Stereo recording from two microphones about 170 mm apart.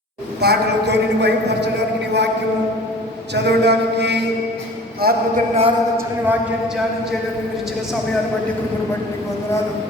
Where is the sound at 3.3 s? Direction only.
80° right.